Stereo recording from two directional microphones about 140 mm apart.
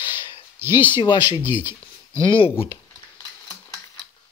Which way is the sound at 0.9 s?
35° left (ahead or behind).